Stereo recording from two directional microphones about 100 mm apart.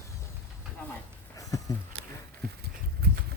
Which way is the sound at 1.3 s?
35° left (ahead or behind).